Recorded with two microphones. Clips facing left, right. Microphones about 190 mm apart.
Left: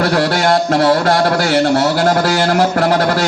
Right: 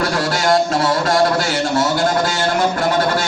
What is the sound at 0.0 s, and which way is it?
A man's voice, 60° left (ahead or behind).